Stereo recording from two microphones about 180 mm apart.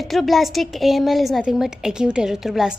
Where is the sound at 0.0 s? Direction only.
Centre (ahead or behind).